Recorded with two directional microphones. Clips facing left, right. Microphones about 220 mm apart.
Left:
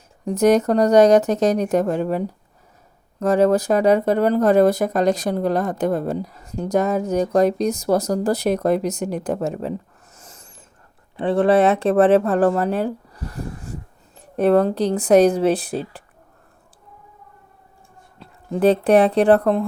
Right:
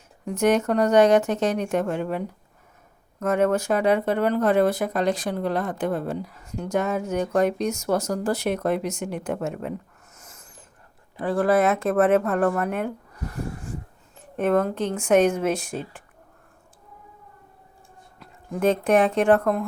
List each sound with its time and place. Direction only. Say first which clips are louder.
0.3 s speech: left 5 dB; 35° left (ahead or behind)
10.2 s snort: left 3 dB; 30° left (ahead or behind)
11.2 s speech: left 5 dB; 25° left (ahead or behind)
14.2 s speech: left 5 dB; 35° left (ahead or behind)
18.2 s speech: left 6 dB; 30° left (ahead or behind)